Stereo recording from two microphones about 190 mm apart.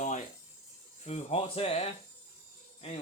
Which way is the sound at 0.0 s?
40° left (ahead or behind).